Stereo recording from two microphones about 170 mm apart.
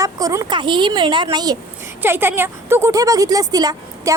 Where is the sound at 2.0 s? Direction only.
15° right (ahead or behind).